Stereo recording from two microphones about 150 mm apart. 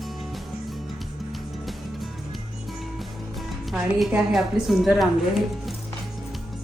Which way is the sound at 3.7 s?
5° right (ahead or behind).